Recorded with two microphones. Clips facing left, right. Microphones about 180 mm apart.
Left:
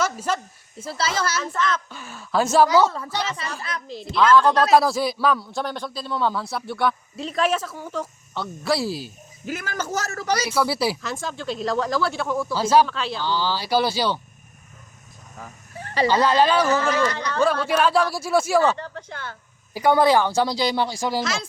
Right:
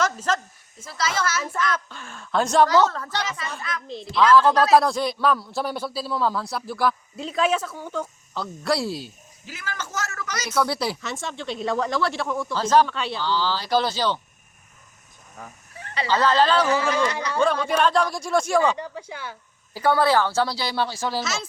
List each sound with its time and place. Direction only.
0.0 s a sound: 10° left (ahead or behind)
0.8 s a child's voice: 30° left (ahead or behind)
1.4 s speech: 10° right (ahead or behind)
1.9 s speech: 5° left (ahead or behind)
3.6 s a man's voice: 35° left (ahead or behind)
4.1 s a man's voice: centre (ahead or behind)
9.5 s a man's voice: 45° left (ahead or behind)
10.5 s a man's voice: 5° left (ahead or behind)
13.2 s speech: 15° left (ahead or behind)
16.0 s speech: 15° left (ahead or behind)
17.0 s speech: 10° right (ahead or behind)
17.4 s speech: 5° left (ahead or behind)
18.8 s speech: 10° right (ahead or behind)
19.7 s speech: 15° left (ahead or behind)